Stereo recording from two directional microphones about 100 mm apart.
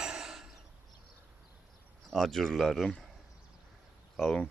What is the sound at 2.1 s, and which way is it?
Speech, 5° left (ahead or behind).